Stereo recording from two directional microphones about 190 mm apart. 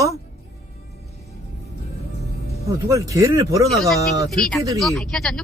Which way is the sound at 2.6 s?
15° right (ahead or behind).